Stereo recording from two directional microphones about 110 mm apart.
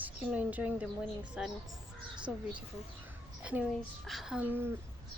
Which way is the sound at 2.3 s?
5° right (ahead or behind).